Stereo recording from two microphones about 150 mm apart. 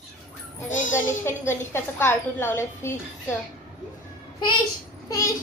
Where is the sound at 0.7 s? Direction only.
55° left (ahead or behind).